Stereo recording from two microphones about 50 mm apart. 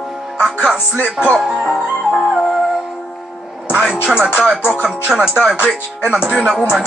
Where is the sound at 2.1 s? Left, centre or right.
Centre.